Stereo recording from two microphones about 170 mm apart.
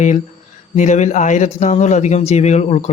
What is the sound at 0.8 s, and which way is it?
Speech, 45° left (ahead or behind).